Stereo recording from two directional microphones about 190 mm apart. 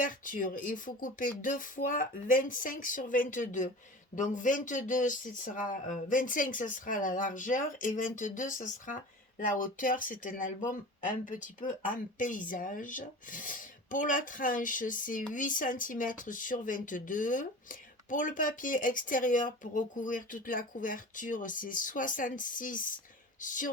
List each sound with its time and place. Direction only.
0.0 s speech: 45° left (ahead or behind)